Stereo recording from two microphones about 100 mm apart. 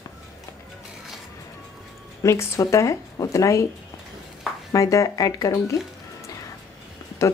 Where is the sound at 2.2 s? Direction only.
30° left (ahead or behind).